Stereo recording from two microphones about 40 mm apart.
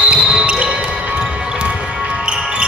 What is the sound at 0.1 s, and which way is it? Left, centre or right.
Music, right.